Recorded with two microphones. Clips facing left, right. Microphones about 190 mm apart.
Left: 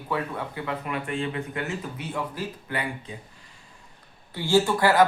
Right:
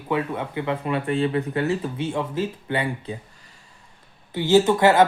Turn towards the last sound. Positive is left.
turn(degrees=-25)  # may be behind; listen again after turning